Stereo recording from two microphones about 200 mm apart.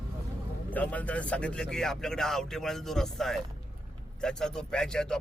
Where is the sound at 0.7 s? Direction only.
10° left (ahead or behind).